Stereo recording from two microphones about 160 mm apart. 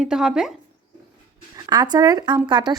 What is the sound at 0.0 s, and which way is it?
Speech, 5° right (ahead or behind).